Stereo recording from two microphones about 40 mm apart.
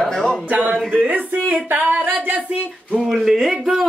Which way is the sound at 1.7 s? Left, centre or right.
Right.